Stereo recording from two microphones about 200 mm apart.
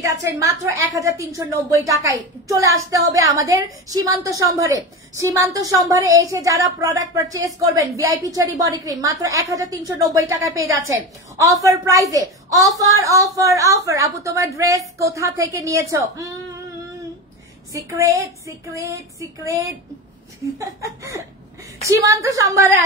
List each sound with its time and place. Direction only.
0.0 s a woman's voice: 15° right (ahead or behind)
17.7 s a woman's voice: 15° right (ahead or behind)